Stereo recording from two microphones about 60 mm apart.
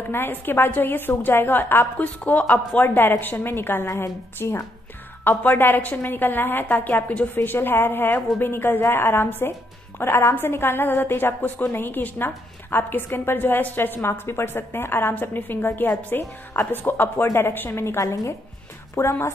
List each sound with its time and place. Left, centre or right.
0.1 s a woman's voice: left
2.8 s a woman's voice: left
5.4 s a woman's voice: left
10.9 s a woman's voice: left
11.1 s a woman's voice: left
19.0 s a woman's voice: left